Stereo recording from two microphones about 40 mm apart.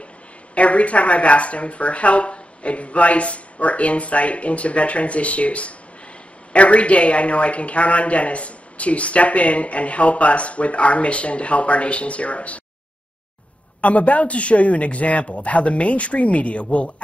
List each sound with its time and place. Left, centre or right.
0.6 s a woman's voice: left
13.7 s a woman's voice: left